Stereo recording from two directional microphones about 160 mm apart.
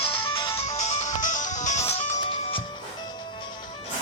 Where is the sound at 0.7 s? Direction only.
45° left (ahead or behind).